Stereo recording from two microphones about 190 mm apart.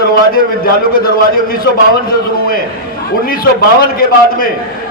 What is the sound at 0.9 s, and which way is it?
Speech, 50° left (ahead or behind).